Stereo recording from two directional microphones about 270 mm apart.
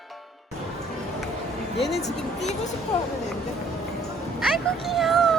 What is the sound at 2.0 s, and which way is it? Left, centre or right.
Speech, left.